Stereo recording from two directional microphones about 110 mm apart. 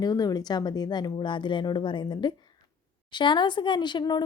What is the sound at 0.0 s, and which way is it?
A woman's voice, 35° left (ahead or behind).